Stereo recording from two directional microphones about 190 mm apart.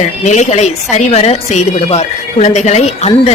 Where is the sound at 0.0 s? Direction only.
40° left (ahead or behind).